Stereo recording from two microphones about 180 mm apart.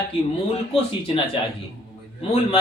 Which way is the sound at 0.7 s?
30° left (ahead or behind).